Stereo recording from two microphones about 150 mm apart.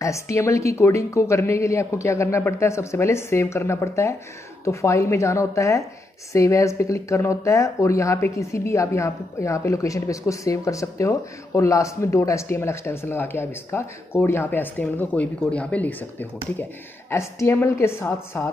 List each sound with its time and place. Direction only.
0.0 s a woman's voice: 20° left (ahead or behind)